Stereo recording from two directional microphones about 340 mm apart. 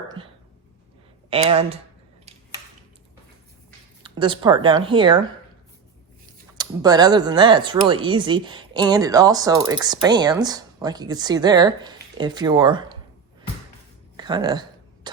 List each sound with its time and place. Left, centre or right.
1.3 s speech: centre
4.0 s speech: centre
6.6 s speech: centre
14.2 s a sound: centre